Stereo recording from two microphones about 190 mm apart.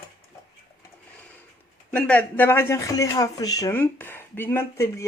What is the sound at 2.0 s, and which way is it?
Speech, 10° left (ahead or behind).